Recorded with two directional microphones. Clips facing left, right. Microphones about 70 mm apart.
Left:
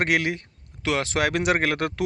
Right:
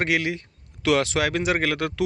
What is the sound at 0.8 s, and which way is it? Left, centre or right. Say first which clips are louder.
Speech: right 4 dB; left.